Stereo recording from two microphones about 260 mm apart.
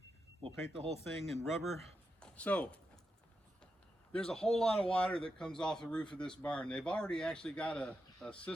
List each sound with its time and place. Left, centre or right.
0.4 s speech: right
1.2 s speech: centre
2.2 s a sound: centre
4.1 s speech: centre